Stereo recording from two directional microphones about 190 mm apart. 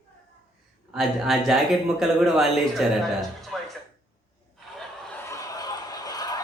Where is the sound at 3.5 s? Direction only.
Centre (ahead or behind).